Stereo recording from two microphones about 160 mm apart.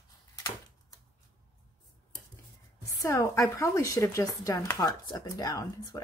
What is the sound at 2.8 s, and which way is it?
A woman's voice, 20° left (ahead or behind).